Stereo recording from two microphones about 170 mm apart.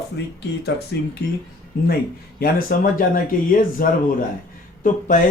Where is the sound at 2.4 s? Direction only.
55° left (ahead or behind).